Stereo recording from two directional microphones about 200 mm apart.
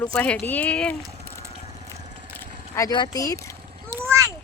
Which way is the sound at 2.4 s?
15° left (ahead or behind).